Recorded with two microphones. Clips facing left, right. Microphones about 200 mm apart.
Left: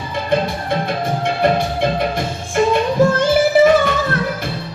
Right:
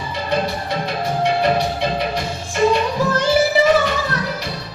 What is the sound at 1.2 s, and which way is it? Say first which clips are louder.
Music: even; 50° left (ahead or behind).